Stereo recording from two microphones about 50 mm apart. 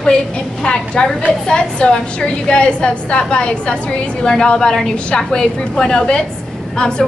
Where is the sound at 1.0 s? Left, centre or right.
Centre.